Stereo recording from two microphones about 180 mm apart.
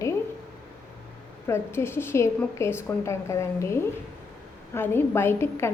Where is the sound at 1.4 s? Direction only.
15° left (ahead or behind).